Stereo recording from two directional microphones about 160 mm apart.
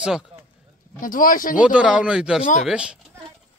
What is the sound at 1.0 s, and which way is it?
Speech, 60° left (ahead or behind).